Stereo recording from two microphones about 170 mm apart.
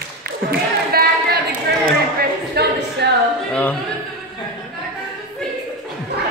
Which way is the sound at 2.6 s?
75° right (ahead or behind).